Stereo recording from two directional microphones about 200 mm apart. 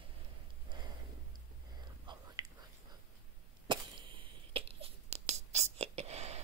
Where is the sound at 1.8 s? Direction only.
20° right (ahead or behind).